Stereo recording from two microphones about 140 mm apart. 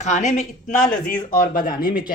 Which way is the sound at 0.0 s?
60° left (ahead or behind).